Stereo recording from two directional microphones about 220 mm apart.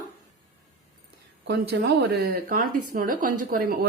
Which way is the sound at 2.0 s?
45° right (ahead or behind).